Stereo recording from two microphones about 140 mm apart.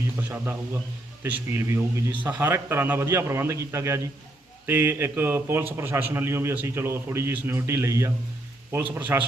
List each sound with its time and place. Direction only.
0.2 s a man's voice: 15° right (ahead or behind)